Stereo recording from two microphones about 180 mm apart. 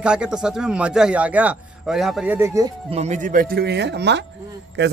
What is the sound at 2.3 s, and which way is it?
Speech, 15° right (ahead or behind).